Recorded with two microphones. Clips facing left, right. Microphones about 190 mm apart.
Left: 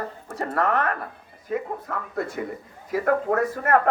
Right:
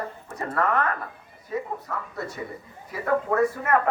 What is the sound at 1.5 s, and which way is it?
Speech, 55° left (ahead or behind).